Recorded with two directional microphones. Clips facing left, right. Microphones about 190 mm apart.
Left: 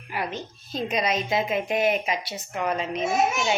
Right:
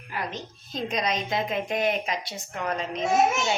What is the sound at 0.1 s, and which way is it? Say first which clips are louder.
A woman's voice: left 3 dB; 10° left (ahead or behind).